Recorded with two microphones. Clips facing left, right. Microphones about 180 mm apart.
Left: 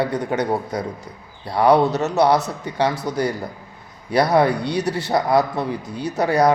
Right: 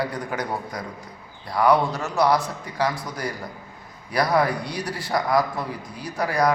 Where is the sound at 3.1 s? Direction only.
30° left (ahead or behind).